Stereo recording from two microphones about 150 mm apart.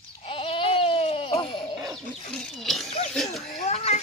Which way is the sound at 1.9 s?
5° left (ahead or behind).